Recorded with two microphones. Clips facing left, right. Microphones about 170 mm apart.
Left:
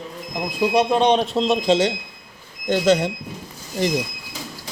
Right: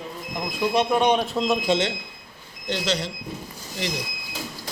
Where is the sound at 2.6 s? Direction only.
50° left (ahead or behind).